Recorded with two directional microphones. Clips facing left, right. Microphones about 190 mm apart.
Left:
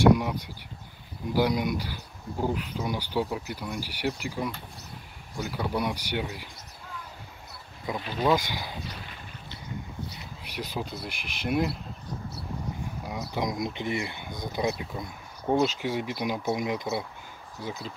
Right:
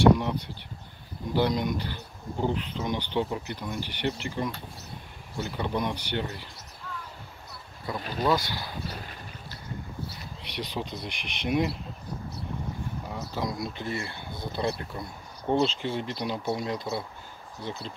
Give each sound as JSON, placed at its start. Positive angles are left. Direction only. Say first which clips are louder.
{"t": 0.0, "sound": "a sound", "louder": "even", "side_deg": 10}
{"t": 1.3, "sound": "speech", "louder": "left 1 dB", "side_deg": 10}
{"t": 8.2, "sound": "speech", "louder": "left 1 dB", "side_deg": 15}
{"t": 10.4, "sound": "speech", "louder": "even", "side_deg": 5}
{"t": 13.1, "sound": "speech", "louder": "left 3 dB", "side_deg": 15}